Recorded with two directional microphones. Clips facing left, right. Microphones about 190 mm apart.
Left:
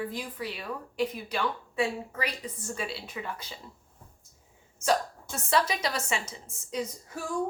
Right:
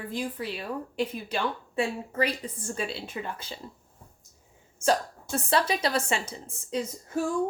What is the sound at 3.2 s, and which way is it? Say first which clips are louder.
Speech: right 2 dB; 40° right (ahead or behind).